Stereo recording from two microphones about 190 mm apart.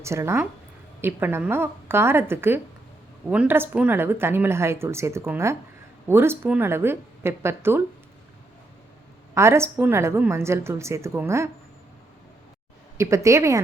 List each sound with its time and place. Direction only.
0.0 s speech: 15° right (ahead or behind)
9.3 s speech: 15° right (ahead or behind)
13.0 s speech: 15° right (ahead or behind)